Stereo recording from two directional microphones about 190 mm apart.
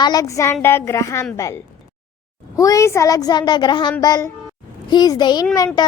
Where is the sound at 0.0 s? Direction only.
20° left (ahead or behind).